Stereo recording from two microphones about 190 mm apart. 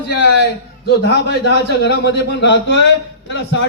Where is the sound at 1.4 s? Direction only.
65° left (ahead or behind).